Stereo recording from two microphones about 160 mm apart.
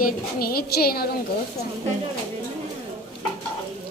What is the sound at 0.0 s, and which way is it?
A woman's voice, 70° left (ahead or behind).